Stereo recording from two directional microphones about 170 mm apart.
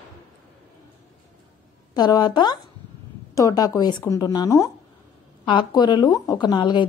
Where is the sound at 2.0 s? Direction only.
25° left (ahead or behind).